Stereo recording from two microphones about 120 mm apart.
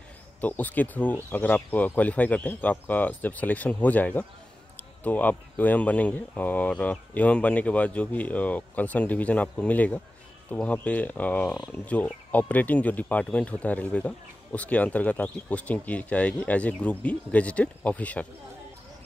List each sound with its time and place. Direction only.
0.4 s speech: 15° left (ahead or behind)